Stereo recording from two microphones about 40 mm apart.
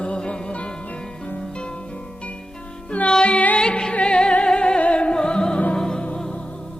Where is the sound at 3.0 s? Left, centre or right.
Left.